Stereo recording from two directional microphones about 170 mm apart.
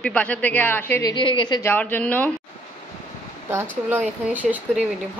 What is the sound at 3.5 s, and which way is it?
Speech, 15° right (ahead or behind).